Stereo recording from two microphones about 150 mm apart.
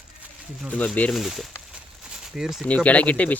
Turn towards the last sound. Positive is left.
turn(degrees=10)  # may be behind; listen again after turning